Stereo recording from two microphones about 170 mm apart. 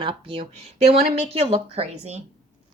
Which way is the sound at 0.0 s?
30° right (ahead or behind).